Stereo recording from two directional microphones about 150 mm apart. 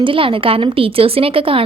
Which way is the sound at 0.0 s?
35° right (ahead or behind).